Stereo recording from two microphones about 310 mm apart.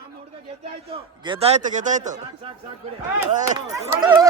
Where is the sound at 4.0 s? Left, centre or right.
Centre.